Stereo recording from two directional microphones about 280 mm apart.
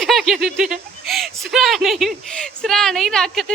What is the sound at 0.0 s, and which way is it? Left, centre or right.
Speech, centre.